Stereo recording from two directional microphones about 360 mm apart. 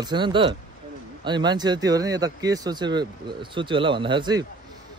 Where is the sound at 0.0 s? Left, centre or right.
Centre.